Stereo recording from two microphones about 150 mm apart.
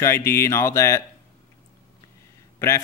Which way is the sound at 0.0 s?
15° left (ahead or behind).